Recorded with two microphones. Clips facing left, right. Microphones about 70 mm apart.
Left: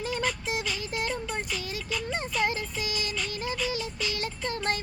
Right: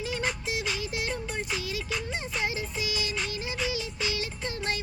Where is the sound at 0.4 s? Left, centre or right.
Left.